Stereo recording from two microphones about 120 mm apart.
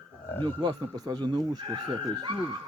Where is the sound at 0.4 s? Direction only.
40° right (ahead or behind).